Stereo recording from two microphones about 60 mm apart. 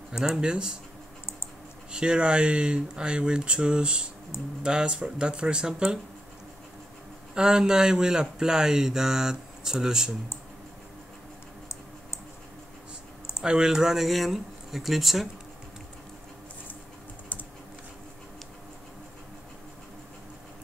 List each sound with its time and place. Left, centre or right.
0.1 s speech: centre
1.9 s speech: centre
7.3 s speech: centre
13.4 s speech: centre